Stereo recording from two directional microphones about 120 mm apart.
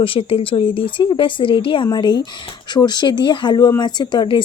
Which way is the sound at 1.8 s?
35° left (ahead or behind).